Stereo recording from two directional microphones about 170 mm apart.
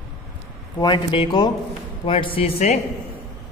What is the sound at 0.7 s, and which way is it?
A man's voice, 30° left (ahead or behind).